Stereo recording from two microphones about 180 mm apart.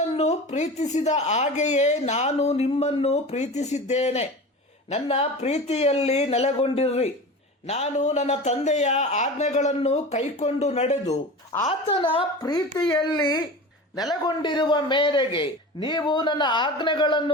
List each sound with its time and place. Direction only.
0.2 s a woman's voice: 40° left (ahead or behind)